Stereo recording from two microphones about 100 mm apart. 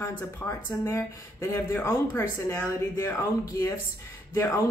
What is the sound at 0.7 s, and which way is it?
Speech, 25° left (ahead or behind).